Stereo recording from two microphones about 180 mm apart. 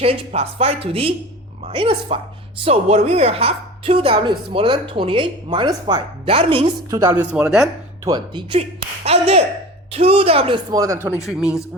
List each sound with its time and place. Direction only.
0.0 s a woman's voice: 35° right (ahead or behind)
6.9 s speech: 15° right (ahead or behind)
7.3 s a man's voice: 5° right (ahead or behind)
8.0 s a woman's voice: 25° right (ahead or behind)
10.8 s speech: 15° right (ahead or behind)
11.2 s a man's voice: 5° right (ahead or behind)